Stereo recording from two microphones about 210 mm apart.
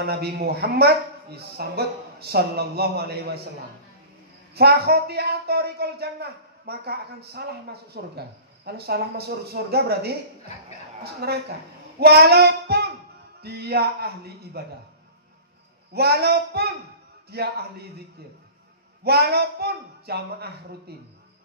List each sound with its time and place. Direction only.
0.0 s speech: 50° right (ahead or behind)
4.6 s speech: 50° right (ahead or behind)
11.2 s speech: 45° right (ahead or behind)
12.0 s child singing: 50° right (ahead or behind)
13.4 s speech: 50° right (ahead or behind)
15.9 s speech: 50° right (ahead or behind)
19.0 s speech: 50° right (ahead or behind)